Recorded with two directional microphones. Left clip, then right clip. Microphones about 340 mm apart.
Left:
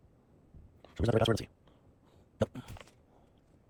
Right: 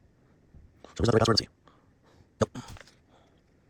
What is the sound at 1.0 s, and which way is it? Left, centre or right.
Speech, centre.